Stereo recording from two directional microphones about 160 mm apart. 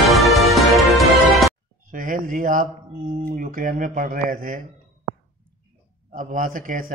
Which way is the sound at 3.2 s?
60° right (ahead or behind).